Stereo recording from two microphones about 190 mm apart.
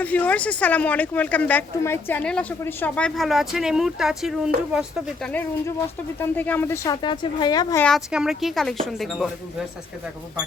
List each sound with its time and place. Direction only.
0.0 s speech: 10° left (ahead or behind)
5.3 s speech: 10° left (ahead or behind)
7.0 s a woman's voice: 25° left (ahead or behind)
7.9 s speech: centre (ahead or behind)